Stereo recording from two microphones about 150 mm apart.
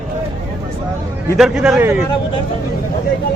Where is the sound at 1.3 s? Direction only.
5° right (ahead or behind).